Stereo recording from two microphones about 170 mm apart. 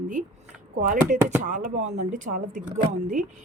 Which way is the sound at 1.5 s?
50° right (ahead or behind).